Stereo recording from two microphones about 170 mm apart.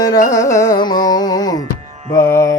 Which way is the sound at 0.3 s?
20° left (ahead or behind).